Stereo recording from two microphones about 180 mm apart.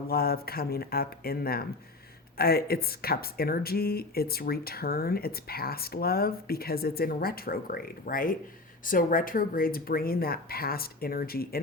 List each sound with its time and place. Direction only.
0.1 s speech: 55° left (ahead or behind)